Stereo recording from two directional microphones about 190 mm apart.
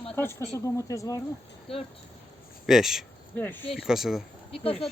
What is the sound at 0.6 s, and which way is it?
Speech, 15° left (ahead or behind).